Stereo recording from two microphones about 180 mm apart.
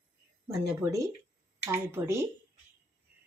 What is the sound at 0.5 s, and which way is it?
Speech, 15° right (ahead or behind).